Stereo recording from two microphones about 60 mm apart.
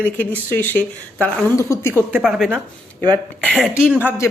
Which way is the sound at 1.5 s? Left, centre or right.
Left.